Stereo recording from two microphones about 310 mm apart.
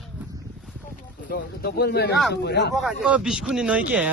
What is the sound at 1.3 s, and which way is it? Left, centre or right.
A man's voice, left.